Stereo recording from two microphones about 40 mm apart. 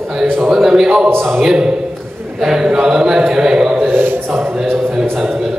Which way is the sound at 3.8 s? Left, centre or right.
Right.